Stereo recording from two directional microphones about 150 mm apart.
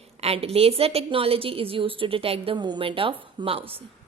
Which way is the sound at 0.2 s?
45° right (ahead or behind).